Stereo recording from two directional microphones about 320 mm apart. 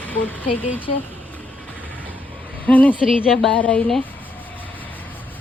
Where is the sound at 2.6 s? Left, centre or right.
Centre.